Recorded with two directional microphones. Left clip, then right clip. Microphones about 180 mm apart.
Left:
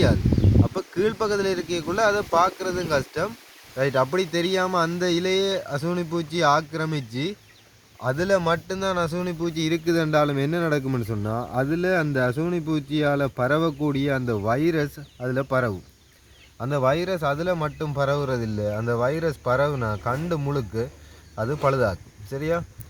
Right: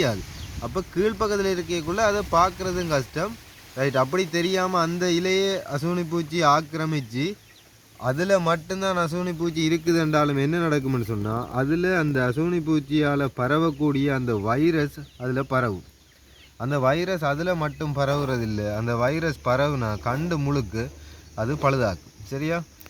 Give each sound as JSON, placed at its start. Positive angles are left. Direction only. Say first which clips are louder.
{"t": 0.7, "sound": "a man's voice", "louder": "even", "side_deg": 25}